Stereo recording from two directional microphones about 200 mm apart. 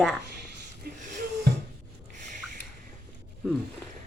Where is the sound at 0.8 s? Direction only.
45° right (ahead or behind).